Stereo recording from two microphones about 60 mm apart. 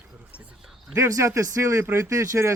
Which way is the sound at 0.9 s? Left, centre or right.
Right.